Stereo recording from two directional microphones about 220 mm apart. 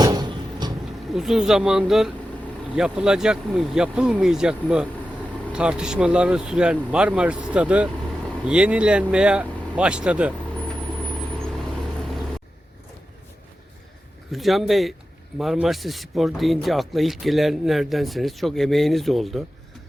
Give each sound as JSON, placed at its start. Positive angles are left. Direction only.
{"t": 0.0, "sound": "a sound", "side_deg": -20}
{"t": 1.1, "sound": "speech", "side_deg": 0}
{"t": 14.3, "sound": "speech", "side_deg": 0}